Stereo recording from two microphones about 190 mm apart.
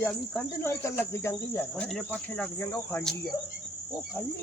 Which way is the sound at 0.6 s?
15° left (ahead or behind).